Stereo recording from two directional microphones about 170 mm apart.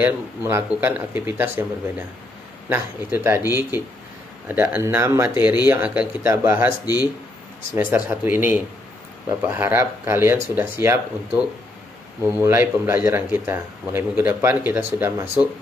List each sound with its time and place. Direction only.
0.0 s speech: 15° right (ahead or behind)
2.7 s speech: 10° right (ahead or behind)
7.7 s speech: 15° right (ahead or behind)